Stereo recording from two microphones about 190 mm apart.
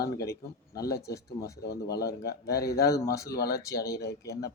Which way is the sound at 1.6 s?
55° left (ahead or behind).